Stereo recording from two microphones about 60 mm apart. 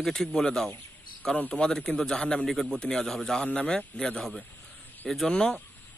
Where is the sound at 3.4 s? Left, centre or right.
Left.